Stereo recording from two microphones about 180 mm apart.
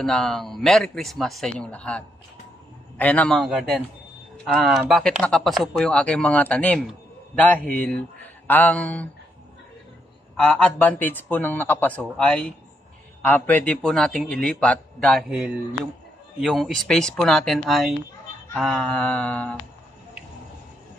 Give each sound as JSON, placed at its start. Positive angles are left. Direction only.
{"t": 0.0, "sound": "speech", "side_deg": 0}
{"t": 10.3, "sound": "a man's voice", "side_deg": 5}